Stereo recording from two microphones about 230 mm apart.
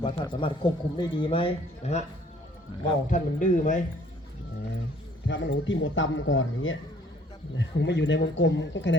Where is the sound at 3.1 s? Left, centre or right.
Left.